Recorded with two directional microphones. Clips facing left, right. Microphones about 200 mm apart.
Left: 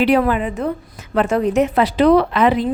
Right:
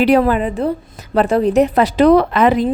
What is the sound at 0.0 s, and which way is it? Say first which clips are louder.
A woman's voice: right 3 dB; 40° right (ahead or behind).